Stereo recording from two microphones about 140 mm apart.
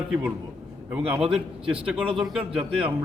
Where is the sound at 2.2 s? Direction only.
5° right (ahead or behind).